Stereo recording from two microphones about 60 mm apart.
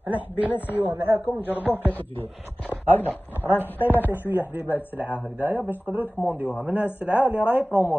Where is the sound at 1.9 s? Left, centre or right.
Left.